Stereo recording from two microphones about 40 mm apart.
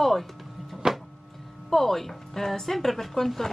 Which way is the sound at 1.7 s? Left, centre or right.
Centre.